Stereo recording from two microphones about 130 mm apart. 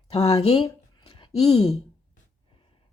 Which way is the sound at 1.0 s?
45° left (ahead or behind).